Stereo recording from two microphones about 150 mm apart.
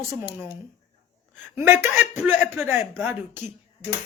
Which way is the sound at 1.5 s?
15° right (ahead or behind).